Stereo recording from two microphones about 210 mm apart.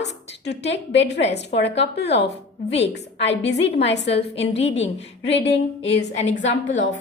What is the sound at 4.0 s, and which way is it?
Speech, 30° left (ahead or behind).